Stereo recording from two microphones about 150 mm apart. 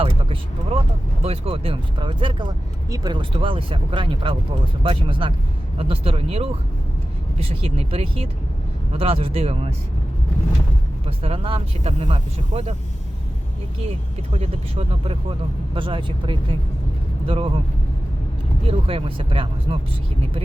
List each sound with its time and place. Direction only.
0.0 s vehicle: 40° right (ahead or behind)
1.2 s speech: 40° right (ahead or behind)
11.0 s speech: 40° right (ahead or behind)
14.3 s speech: 40° right (ahead or behind)
18.7 s speech: 40° right (ahead or behind)